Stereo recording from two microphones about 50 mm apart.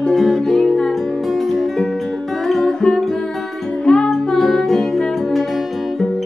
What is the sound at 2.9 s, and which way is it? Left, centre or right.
Music, centre.